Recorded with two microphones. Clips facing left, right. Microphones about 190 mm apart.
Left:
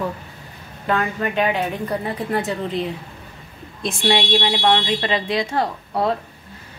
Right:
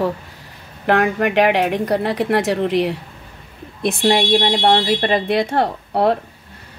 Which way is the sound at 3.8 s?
60° right (ahead or behind).